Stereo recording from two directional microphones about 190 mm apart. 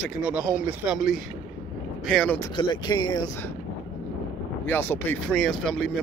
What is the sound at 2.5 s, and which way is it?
Speech, 25° left (ahead or behind).